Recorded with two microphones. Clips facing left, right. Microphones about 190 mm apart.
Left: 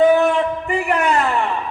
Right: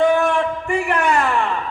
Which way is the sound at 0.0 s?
20° left (ahead or behind).